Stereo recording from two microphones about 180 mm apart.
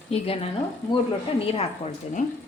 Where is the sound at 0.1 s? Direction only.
35° left (ahead or behind).